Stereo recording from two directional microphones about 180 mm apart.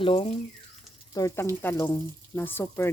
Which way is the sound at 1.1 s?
15° left (ahead or behind).